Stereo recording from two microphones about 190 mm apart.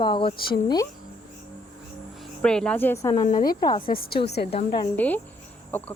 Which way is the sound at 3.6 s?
20° left (ahead or behind).